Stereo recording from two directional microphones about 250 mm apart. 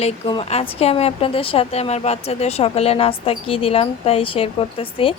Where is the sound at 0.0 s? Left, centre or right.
Left.